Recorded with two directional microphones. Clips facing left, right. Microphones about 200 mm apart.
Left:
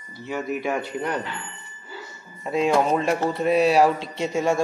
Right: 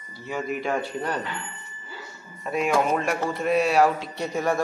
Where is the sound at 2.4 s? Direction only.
25° left (ahead or behind).